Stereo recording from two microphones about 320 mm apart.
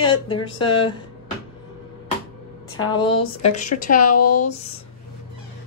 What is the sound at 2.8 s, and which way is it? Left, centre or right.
Speech, centre.